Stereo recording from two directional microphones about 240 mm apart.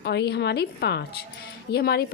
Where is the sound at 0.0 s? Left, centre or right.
Left.